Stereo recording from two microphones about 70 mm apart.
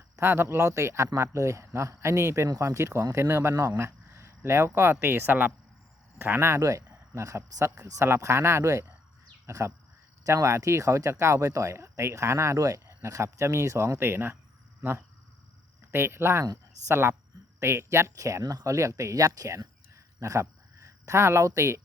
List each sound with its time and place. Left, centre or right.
0.2 s speech: right
3.5 s speech: right
6.6 s speech: right
15.9 s speech: right